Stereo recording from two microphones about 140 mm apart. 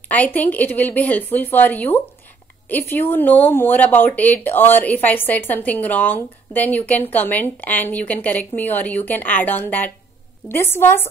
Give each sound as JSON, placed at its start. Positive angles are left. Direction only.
{"t": 0.1, "sound": "speech", "side_deg": 10}